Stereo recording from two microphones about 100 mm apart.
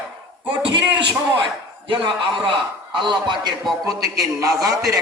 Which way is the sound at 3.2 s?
45° right (ahead or behind).